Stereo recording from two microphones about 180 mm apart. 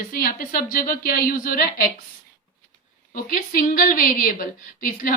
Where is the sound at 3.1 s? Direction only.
50° left (ahead or behind).